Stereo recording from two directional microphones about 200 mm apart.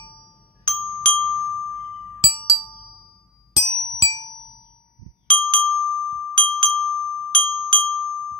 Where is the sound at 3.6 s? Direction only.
20° left (ahead or behind).